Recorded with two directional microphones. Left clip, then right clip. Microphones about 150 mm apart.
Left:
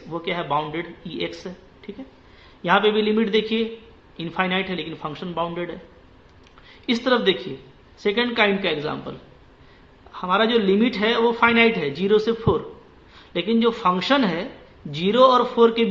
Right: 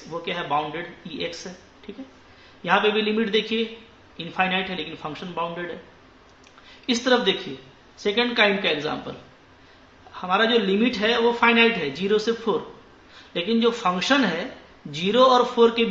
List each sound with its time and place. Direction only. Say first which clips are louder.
0.2 s speech: left 1 dB; 35° left (ahead or behind)
6.9 s speech: left 1 dB; 30° left (ahead or behind)
10.1 s speech: left 1 dB; 30° left (ahead or behind)